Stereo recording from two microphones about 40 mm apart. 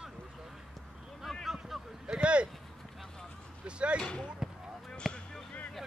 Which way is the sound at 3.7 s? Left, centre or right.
Right.